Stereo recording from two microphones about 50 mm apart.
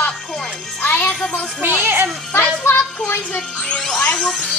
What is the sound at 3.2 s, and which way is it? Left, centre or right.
Speech, left.